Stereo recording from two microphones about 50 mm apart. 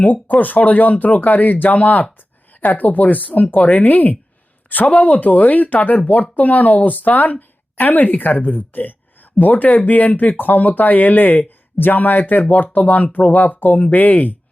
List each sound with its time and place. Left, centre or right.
0.0 s speech: left